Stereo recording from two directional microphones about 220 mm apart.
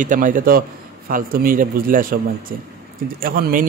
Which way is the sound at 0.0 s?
35° right (ahead or behind).